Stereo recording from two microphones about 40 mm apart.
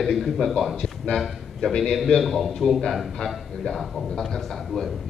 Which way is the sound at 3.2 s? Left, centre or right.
Centre.